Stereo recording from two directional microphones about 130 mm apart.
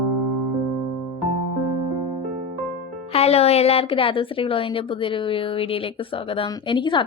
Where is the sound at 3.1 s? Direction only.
50° left (ahead or behind).